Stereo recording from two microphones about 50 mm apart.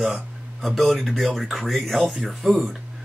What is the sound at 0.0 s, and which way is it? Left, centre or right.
Speech, centre.